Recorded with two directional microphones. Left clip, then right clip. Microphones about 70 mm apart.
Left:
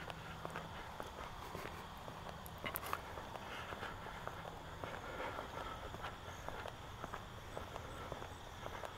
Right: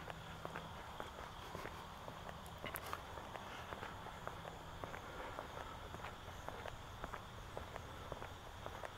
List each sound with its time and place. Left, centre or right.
2.6 s walk: left